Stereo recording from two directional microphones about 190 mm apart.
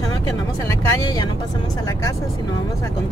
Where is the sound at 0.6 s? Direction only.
20° left (ahead or behind).